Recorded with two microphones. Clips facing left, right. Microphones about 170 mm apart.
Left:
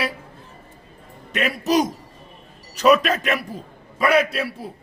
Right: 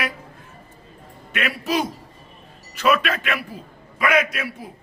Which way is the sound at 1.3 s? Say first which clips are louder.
Left 4 dB; 40° left (ahead or behind).